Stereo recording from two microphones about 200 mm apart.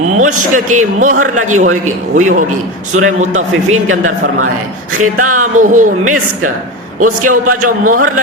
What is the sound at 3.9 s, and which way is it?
Speech, 90° right.